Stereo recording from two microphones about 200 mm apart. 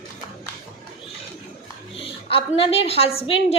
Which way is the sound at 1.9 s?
25° left (ahead or behind).